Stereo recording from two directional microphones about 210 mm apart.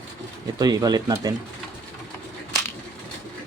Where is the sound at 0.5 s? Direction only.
15° right (ahead or behind).